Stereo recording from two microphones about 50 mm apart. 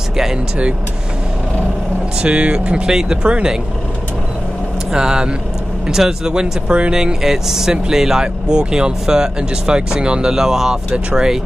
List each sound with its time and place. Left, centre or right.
2.2 s speech: right
4.9 s speech: centre